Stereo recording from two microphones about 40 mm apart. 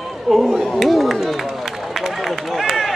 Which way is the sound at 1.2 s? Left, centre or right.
Centre.